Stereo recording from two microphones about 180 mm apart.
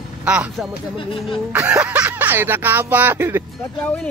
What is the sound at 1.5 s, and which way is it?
Speech, 5° right (ahead or behind).